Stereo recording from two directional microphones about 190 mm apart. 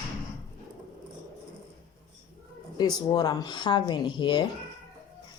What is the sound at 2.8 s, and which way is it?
Speech, 20° left (ahead or behind).